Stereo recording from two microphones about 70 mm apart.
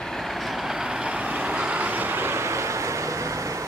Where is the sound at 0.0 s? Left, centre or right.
Centre.